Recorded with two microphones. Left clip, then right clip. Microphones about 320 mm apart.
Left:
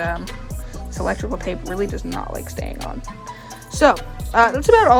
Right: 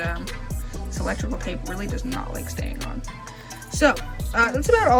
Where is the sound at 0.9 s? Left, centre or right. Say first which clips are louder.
Left 6 dB; centre.